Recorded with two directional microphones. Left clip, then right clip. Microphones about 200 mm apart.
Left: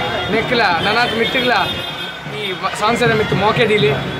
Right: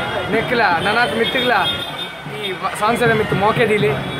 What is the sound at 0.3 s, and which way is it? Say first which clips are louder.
Speech: even; 5° right (ahead or behind).